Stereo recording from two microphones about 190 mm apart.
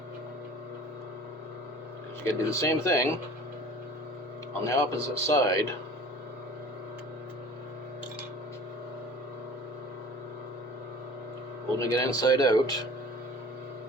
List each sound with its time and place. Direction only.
2.2 s a man's voice: 15° left (ahead or behind)
4.6 s a man's voice: 15° left (ahead or behind)
11.8 s speech: 15° left (ahead or behind)